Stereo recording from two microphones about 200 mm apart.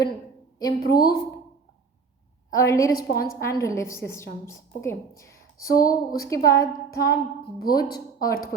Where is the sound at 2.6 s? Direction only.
15° left (ahead or behind).